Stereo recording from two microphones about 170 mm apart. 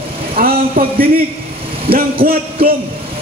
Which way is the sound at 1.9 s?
35° right (ahead or behind).